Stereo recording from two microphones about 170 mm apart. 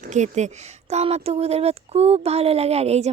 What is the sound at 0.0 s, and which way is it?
Speech, 45° right (ahead or behind).